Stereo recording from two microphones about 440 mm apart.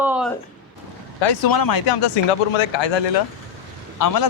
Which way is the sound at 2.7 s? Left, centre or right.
Left.